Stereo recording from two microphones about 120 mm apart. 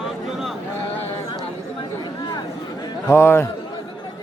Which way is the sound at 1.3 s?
35° left (ahead or behind).